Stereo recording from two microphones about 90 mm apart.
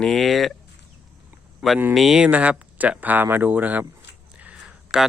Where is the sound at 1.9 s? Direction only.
Centre (ahead or behind).